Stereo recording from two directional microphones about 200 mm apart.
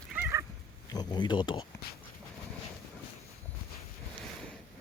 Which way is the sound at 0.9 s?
20° left (ahead or behind).